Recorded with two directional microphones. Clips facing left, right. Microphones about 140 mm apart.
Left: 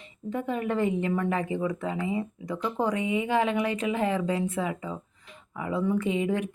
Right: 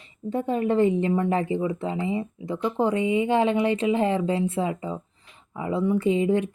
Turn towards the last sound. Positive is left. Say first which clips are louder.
# right 5 dB
turn(degrees=-30)  # may be behind; listen again after turning